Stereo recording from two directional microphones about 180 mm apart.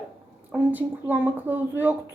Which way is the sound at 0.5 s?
10° right (ahead or behind).